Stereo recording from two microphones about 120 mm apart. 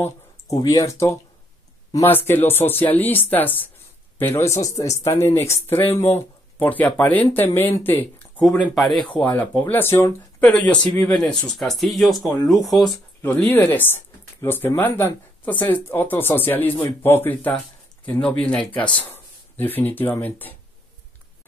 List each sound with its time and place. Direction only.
0.0 s speech: 30° left (ahead or behind)
8.5 s speech: centre (ahead or behind)
9.1 s speech: 15° left (ahead or behind)
13.2 s speech: 15° left (ahead or behind)